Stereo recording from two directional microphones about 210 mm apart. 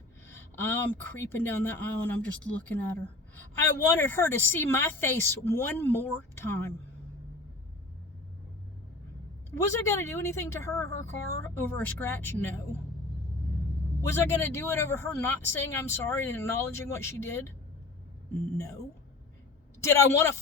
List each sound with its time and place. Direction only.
0.6 s a woman's voice: 10° left (ahead or behind)
9.6 s a woman's voice: 15° left (ahead or behind)
14.0 s a woman's voice: 10° left (ahead or behind)
18.5 s a woman's voice: 15° left (ahead or behind)
19.8 s a woman's voice: 15° left (ahead or behind)